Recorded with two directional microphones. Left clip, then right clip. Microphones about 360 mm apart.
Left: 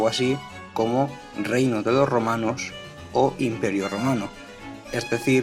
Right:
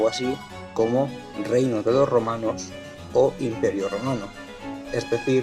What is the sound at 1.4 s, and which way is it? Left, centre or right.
Speech, centre.